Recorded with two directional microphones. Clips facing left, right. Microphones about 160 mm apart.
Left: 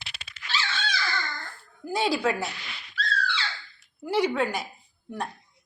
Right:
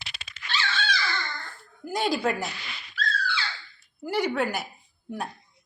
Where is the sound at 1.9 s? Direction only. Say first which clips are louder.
Left 1 dB; centre (ahead or behind).